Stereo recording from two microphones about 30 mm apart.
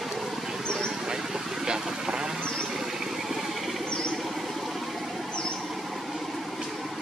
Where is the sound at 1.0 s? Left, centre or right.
Centre.